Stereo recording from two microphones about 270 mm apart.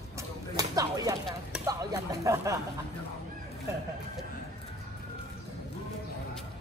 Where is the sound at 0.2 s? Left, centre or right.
Centre.